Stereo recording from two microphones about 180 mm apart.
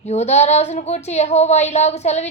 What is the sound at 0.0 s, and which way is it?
Speech, 35° left (ahead or behind).